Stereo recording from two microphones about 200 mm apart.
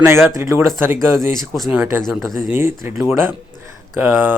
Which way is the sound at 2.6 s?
10° right (ahead or behind).